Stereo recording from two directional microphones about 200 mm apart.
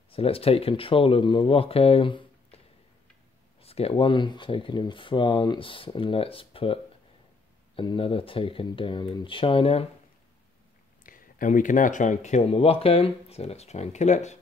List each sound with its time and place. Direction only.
0.1 s speech: 30° left (ahead or behind)
3.6 s speech: 30° left (ahead or behind)
11.1 s speech: 45° left (ahead or behind)